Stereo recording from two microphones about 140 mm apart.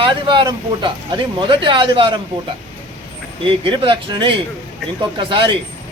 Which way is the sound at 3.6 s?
35° right (ahead or behind).